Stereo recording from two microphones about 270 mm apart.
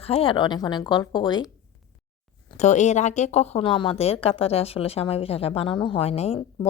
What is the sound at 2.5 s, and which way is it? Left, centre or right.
A woman's voice, left.